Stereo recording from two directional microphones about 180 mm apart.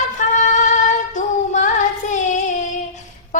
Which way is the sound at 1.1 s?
45° left (ahead or behind).